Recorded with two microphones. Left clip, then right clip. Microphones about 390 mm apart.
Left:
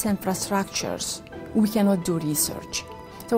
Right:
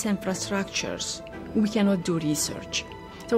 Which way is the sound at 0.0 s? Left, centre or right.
Left.